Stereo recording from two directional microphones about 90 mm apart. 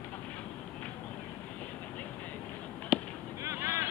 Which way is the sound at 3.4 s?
30° right (ahead or behind).